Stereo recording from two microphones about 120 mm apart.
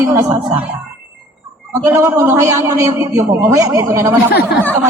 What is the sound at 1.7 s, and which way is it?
A man's voice, 30° right (ahead or behind).